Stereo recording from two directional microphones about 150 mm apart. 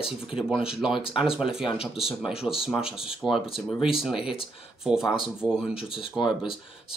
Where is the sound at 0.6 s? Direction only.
5° right (ahead or behind).